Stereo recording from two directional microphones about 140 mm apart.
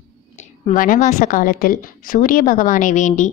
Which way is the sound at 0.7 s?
75° left (ahead or behind).